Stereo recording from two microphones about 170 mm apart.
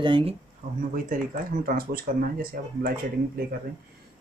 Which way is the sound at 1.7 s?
60° right (ahead or behind).